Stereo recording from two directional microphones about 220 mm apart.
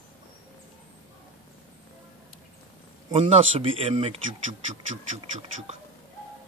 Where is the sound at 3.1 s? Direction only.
25° right (ahead or behind).